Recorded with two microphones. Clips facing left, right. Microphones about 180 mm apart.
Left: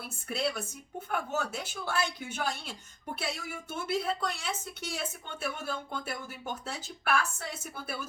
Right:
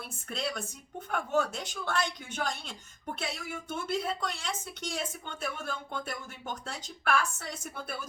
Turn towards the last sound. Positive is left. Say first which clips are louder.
# even
turn(degrees=5)  # may be behind; listen again after turning